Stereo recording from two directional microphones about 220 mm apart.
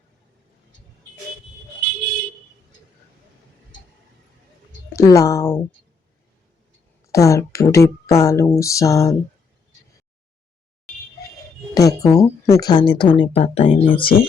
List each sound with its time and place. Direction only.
4.9 s speech: 15° left (ahead or behind)
7.1 s speech: 15° left (ahead or behind)
11.7 s a woman's voice: 15° left (ahead or behind)
14.0 s speech: 40° left (ahead or behind)